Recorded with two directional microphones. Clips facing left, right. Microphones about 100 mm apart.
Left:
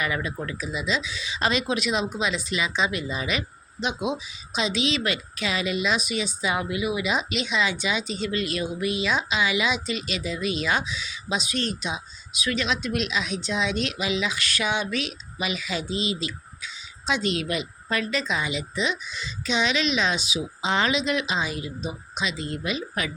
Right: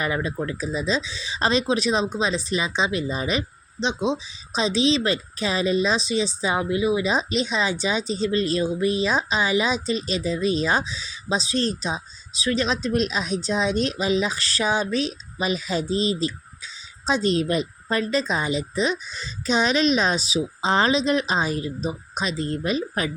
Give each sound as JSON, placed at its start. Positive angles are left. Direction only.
{"t": 0.0, "sound": "speech", "side_deg": -30}